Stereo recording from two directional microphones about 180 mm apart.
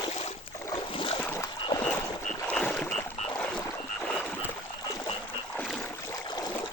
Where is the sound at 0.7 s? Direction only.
30° left (ahead or behind).